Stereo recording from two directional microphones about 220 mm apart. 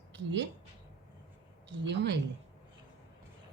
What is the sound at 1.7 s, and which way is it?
Speech, 50° right (ahead or behind).